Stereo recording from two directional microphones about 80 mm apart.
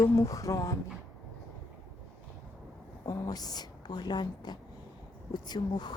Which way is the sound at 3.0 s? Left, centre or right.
Left.